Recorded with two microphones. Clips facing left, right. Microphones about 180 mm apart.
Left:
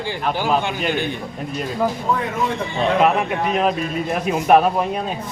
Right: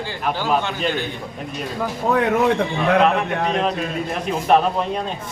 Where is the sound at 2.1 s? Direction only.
70° right (ahead or behind).